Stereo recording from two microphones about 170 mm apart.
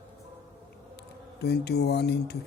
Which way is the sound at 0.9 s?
75° left (ahead or behind).